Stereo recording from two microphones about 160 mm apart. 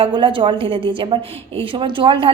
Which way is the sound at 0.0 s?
30° right (ahead or behind).